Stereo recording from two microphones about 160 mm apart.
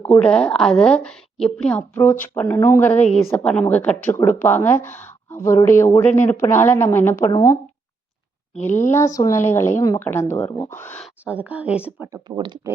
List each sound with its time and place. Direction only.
0.2 s a woman's voice: 5° left (ahead or behind)
2.9 s a woman's voice: 45° left (ahead or behind)
3.2 s a woman's voice: 5° left (ahead or behind)
8.9 s a woman's voice: 20° left (ahead or behind)
11.0 s speech: 10° right (ahead or behind)
12.1 s speech: 25° right (ahead or behind)